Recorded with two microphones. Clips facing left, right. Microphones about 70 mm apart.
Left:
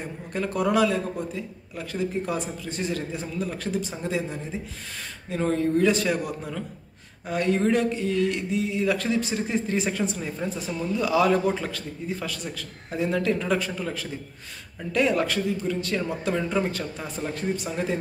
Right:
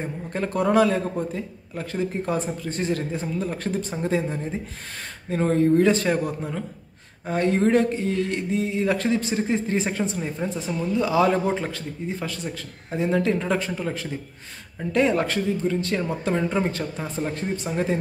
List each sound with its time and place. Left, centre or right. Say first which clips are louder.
0.0 s a man's voice: right 2 dB; right
10.4 s a man's voice: right 2 dB; right